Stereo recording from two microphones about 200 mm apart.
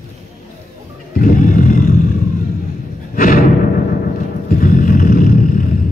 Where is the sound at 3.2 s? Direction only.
45° left (ahead or behind).